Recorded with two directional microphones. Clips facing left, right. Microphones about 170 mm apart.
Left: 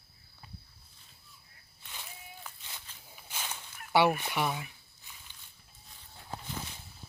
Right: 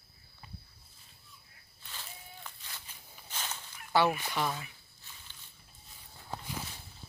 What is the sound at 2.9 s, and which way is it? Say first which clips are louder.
Walk: even; 10° right (ahead or behind).